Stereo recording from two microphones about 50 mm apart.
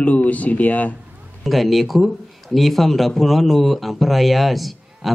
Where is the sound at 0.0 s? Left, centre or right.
Left.